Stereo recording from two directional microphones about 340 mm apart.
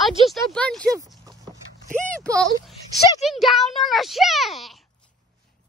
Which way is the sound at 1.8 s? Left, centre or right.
Right.